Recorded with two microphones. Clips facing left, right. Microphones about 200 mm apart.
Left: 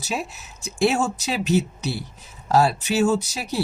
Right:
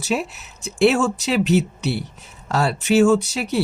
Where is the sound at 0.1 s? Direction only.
65° right (ahead or behind).